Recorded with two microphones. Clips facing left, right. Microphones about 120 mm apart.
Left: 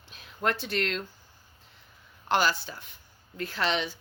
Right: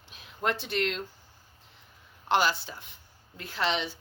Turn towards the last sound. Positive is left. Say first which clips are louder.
# left 1 dB
turn(degrees=-25)  # may be behind; listen again after turning